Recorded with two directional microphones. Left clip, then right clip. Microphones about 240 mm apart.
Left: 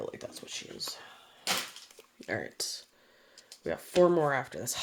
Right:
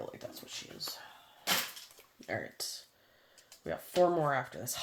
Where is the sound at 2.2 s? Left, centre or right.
Left.